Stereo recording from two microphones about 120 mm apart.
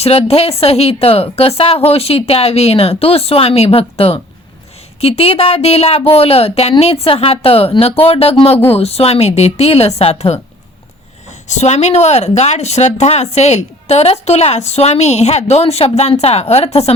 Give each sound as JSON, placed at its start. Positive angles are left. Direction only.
{"t": 0.0, "sound": "speech", "side_deg": 60}
{"t": 11.4, "sound": "speech", "side_deg": 70}